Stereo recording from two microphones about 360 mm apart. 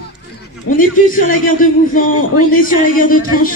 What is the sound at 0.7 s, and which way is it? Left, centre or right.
Speech, left.